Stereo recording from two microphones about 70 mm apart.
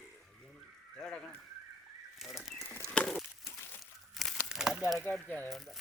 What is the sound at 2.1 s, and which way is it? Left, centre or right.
Bird, centre.